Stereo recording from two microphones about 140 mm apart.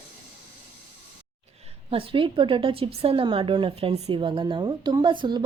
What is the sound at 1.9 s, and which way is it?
Speech, 40° right (ahead or behind).